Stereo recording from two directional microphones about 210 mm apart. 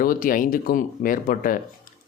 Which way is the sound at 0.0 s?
40° left (ahead or behind).